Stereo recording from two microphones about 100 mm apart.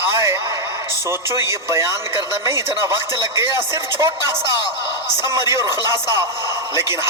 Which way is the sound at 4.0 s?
30° right (ahead or behind).